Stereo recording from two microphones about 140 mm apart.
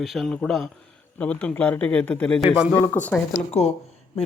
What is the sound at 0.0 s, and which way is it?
Speech, centre (ahead or behind).